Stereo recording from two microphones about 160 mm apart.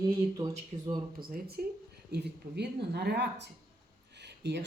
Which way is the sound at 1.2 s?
70° right (ahead or behind).